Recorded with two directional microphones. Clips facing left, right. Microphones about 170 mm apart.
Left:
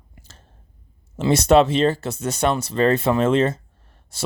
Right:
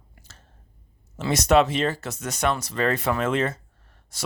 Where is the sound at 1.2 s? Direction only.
30° left (ahead or behind).